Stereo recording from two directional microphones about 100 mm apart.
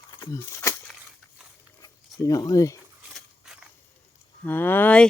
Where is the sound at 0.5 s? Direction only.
30° left (ahead or behind).